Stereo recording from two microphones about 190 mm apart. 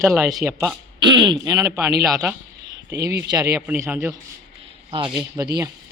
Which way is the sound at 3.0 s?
15° right (ahead or behind).